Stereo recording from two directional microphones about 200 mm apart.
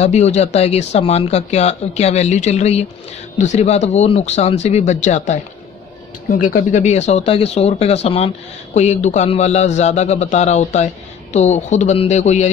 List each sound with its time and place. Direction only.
0.0 s speech: 35° left (ahead or behind)